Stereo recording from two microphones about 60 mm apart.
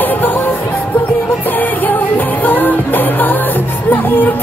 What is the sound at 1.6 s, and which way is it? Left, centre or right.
Music, left.